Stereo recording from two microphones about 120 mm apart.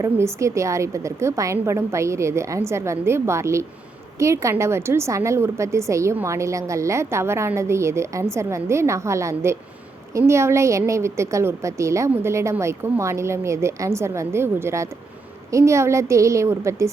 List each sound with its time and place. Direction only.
0.0 s a woman's voice: 25° right (ahead or behind)